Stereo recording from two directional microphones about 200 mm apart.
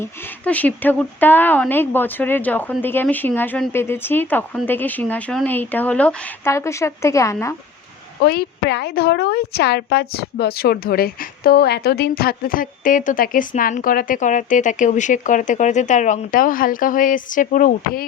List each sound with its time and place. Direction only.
0.0 s speech: 10° left (ahead or behind)
8.2 s speech: 50° left (ahead or behind)